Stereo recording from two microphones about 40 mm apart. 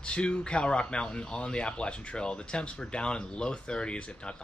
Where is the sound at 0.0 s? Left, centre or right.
Left.